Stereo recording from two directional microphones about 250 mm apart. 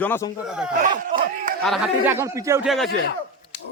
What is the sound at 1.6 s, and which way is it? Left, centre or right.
Speech, centre.